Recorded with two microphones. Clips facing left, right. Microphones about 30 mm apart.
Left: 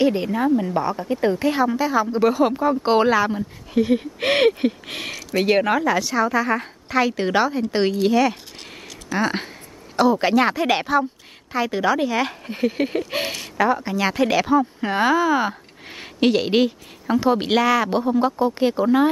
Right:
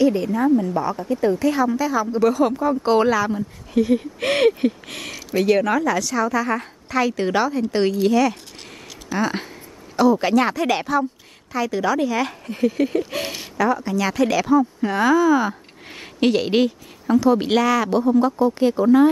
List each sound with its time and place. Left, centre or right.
0.0 s a woman's voice: left
15.9 s speech: centre
17.2 s speech: left
17.5 s speech: centre